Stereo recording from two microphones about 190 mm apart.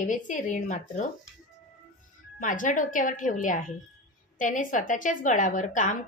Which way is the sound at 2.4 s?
45° left (ahead or behind).